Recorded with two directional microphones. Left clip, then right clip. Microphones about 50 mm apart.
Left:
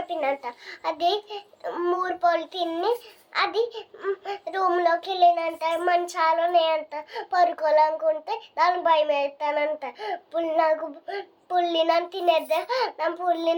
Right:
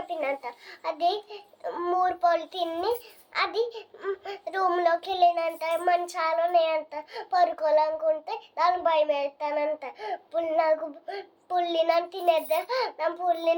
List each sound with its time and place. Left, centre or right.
0.1 s a child's voice: left
4.0 s child singing: centre
5.7 s a child's voice: left